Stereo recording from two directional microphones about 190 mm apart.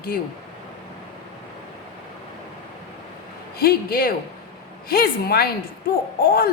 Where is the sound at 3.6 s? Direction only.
50° left (ahead or behind).